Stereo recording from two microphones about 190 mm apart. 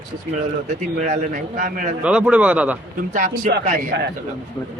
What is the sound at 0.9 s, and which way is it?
Speech, 40° right (ahead or behind).